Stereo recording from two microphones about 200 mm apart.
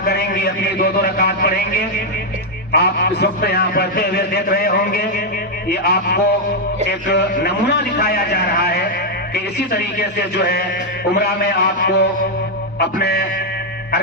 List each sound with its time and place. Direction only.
0.0 s a man's voice: 50° left (ahead or behind)